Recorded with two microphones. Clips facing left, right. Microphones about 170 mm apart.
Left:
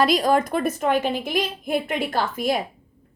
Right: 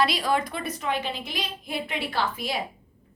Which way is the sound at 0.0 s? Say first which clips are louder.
Left 6 dB; 45° left (ahead or behind).